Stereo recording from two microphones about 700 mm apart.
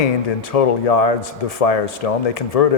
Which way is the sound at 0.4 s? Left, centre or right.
Left.